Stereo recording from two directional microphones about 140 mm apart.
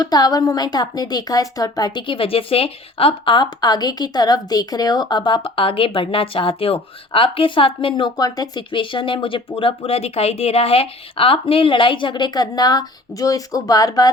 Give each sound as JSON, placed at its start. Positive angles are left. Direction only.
{"t": 0.0, "sound": "a woman's voice", "side_deg": 30}